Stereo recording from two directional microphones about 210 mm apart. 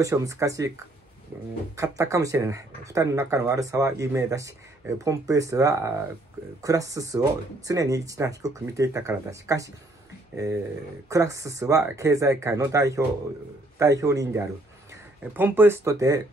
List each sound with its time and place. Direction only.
0.0 s speech: 15° right (ahead or behind)